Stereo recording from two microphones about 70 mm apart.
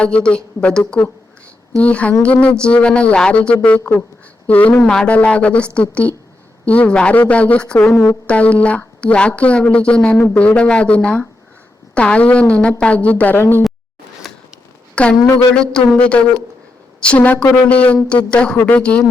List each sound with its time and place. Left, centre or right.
0.0 s a woman's voice: centre
4.7 s a woman's voice: centre
7.8 s a woman's voice: left
8.3 s a woman's voice: centre
15.0 s a woman's voice: centre